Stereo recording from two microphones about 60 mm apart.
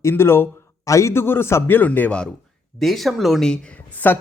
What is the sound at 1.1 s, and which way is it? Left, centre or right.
Speech, left.